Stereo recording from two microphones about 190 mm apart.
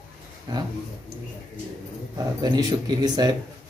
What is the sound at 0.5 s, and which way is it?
Speech, 20° right (ahead or behind).